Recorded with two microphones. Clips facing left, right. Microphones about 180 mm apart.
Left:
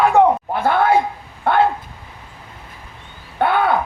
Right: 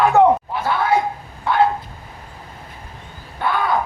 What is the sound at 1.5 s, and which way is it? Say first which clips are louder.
Dog: left 4 dB; 55° left (ahead or behind).